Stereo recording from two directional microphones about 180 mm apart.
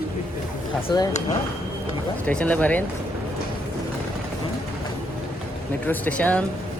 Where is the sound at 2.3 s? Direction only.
10° left (ahead or behind).